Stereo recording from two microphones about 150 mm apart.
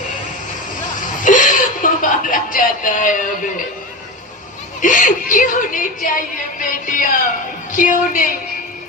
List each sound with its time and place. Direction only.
1.1 s chuckle: 60° left (ahead or behind)
4.8 s a woman's voice: 60° left (ahead or behind)